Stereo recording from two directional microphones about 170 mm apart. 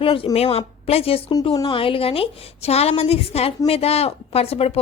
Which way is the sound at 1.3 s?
20° left (ahead or behind).